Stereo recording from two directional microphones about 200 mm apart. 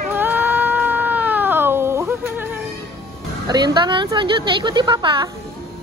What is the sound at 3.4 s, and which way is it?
A woman's voice, 20° right (ahead or behind).